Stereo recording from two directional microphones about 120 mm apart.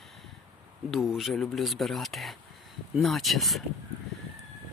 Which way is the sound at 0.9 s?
Centre (ahead or behind).